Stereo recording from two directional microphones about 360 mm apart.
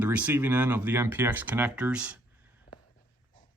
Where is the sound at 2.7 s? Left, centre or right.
Left.